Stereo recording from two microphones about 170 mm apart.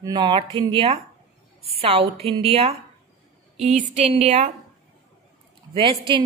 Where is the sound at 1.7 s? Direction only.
35° right (ahead or behind).